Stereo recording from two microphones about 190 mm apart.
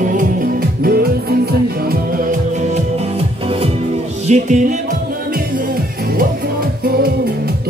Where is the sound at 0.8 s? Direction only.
55° right (ahead or behind).